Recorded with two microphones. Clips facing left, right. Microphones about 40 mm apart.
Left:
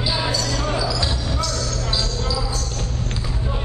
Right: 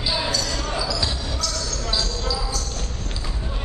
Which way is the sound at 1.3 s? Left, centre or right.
Left.